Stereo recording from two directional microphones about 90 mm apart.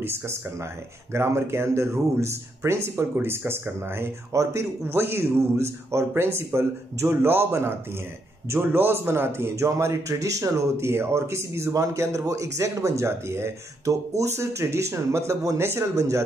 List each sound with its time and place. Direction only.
0.0 s a man's voice: 25° right (ahead or behind)